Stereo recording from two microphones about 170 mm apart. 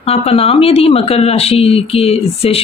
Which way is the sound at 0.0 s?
35° left (ahead or behind).